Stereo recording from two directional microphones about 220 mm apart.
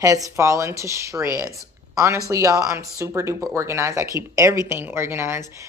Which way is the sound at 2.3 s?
15° right (ahead or behind).